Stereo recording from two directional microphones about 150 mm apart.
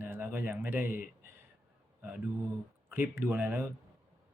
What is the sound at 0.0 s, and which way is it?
Speech, 15° right (ahead or behind).